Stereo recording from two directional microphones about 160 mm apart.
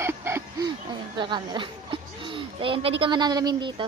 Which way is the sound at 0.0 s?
15° right (ahead or behind).